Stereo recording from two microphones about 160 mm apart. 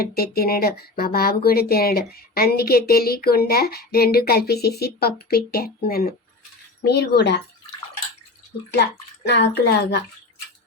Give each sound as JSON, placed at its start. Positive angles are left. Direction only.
{"t": 0.0, "sound": "speech", "side_deg": 75}
{"t": 6.8, "sound": "speech", "side_deg": 90}
{"t": 9.2, "sound": "speech", "side_deg": 90}